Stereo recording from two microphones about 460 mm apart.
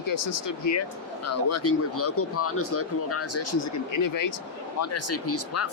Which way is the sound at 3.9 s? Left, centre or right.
Left.